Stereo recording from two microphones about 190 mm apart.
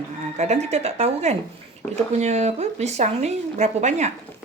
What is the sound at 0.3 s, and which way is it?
A woman's voice, 35° right (ahead or behind).